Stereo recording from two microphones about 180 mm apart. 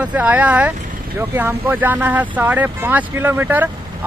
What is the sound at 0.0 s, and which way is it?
Speech, 10° right (ahead or behind).